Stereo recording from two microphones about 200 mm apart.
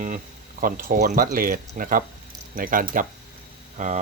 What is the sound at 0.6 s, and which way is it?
Speech, 45° right (ahead or behind).